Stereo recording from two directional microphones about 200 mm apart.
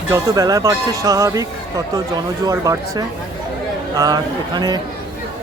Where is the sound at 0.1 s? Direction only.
15° right (ahead or behind).